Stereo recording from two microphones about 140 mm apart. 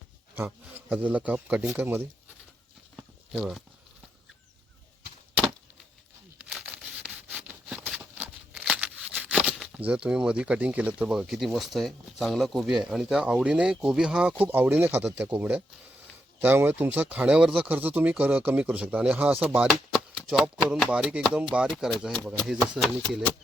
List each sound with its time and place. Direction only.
0.3 s speech: 15° right (ahead or behind)
3.3 s speech: centre (ahead or behind)
6.5 s a sound: 10° right (ahead or behind)
9.7 s speech: 10° right (ahead or behind)